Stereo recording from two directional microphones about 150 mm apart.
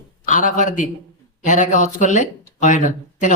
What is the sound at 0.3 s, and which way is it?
Speech, 60° left (ahead or behind).